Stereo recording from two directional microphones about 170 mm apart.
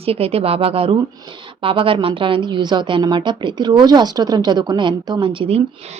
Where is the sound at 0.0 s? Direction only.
35° right (ahead or behind).